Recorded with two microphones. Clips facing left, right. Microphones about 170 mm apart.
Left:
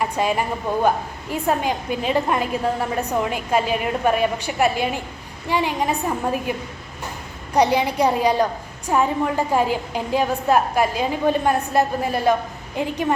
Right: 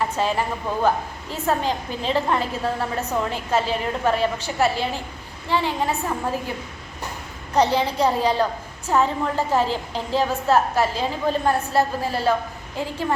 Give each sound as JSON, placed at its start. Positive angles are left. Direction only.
{"t": 0.0, "sound": "a woman's voice", "side_deg": 15}
{"t": 7.5, "sound": "a woman's voice", "side_deg": 15}